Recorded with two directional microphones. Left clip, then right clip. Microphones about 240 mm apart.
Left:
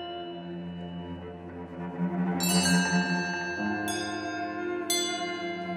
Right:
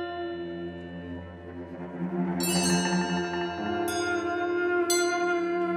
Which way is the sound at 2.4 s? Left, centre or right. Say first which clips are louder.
Left 1 dB; centre.